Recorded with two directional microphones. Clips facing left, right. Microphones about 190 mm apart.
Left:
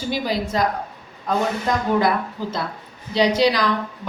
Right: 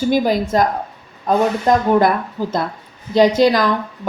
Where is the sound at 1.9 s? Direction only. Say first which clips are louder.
Right 5 dB; 50° right (ahead or behind).